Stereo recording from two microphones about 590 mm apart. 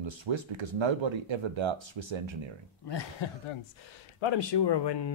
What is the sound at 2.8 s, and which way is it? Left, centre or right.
Speech, left.